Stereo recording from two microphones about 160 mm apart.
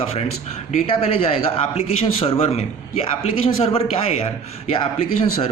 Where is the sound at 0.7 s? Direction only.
35° left (ahead or behind).